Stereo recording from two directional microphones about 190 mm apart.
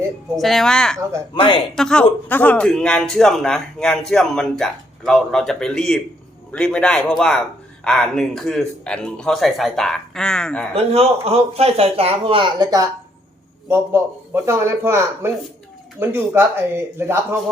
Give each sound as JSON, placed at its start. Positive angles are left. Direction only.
{"t": 0.3, "sound": "a man's voice", "side_deg": 0}
{"t": 1.4, "sound": "speech", "side_deg": 30}
{"t": 1.7, "sound": "a man's voice", "side_deg": 5}
{"t": 10.8, "sound": "speech", "side_deg": -30}
{"t": 13.7, "sound": "speech", "side_deg": -10}